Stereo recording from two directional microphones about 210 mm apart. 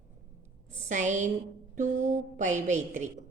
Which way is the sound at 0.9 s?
35° right (ahead or behind).